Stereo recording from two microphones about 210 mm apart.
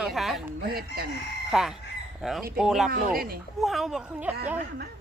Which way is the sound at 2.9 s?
45° right (ahead or behind).